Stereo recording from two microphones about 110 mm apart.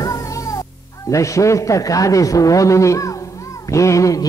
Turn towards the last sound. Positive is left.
turn(degrees=30)  # may be behind; listen again after turning